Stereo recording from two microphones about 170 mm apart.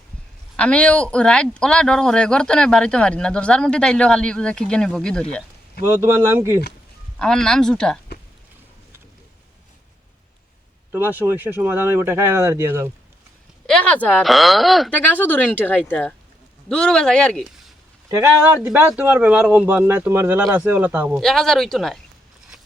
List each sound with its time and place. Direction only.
0.5 s speech: 5° left (ahead or behind)
5.8 s speech: 15° right (ahead or behind)
7.2 s speech: 5° left (ahead or behind)
10.9 s speech: 10° right (ahead or behind)
13.7 s speech: 5° left (ahead or behind)
18.1 s speech: 15° right (ahead or behind)
21.2 s speech: 5° left (ahead or behind)